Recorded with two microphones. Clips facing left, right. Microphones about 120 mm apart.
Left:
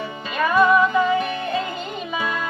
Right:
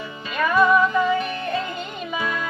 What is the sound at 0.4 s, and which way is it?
Music, 20° left (ahead or behind).